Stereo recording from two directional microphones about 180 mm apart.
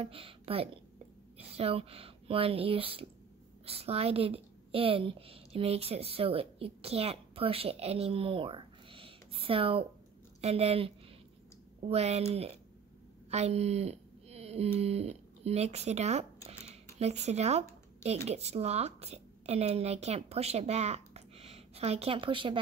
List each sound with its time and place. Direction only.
0.0 s a woman's voice: 30° right (ahead or behind)